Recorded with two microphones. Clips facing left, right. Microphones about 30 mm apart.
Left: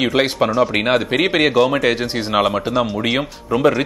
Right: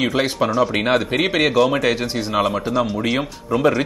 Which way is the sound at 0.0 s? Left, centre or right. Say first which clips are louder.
Left 3 dB; left.